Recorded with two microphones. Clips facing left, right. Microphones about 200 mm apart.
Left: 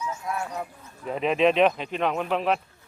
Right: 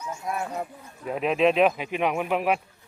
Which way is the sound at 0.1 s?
15° right (ahead or behind).